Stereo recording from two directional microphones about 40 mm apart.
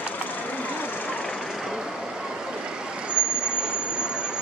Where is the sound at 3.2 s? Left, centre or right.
Right.